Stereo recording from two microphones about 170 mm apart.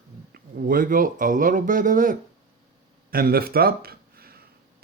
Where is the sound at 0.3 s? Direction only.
55° right (ahead or behind).